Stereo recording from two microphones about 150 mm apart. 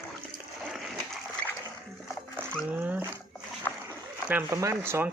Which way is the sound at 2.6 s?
10° right (ahead or behind).